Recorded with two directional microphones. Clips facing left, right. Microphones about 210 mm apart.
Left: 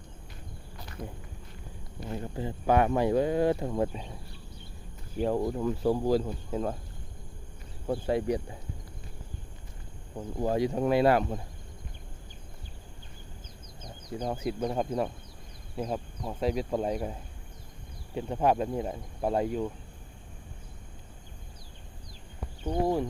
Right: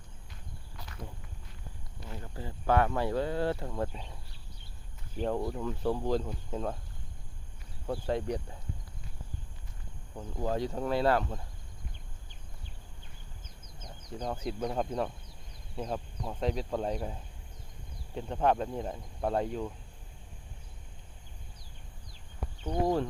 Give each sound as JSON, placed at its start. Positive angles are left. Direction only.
{"t": 2.0, "sound": "speech", "side_deg": 20}
{"t": 5.4, "sound": "speech", "side_deg": 15}
{"t": 8.0, "sound": "speech", "side_deg": 10}
{"t": 10.2, "sound": "speech", "side_deg": 10}
{"t": 14.3, "sound": "speech", "side_deg": 5}
{"t": 22.6, "sound": "speech", "side_deg": 10}